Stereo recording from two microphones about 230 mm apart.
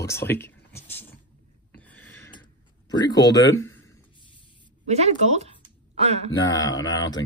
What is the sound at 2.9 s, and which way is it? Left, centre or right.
Speech, centre.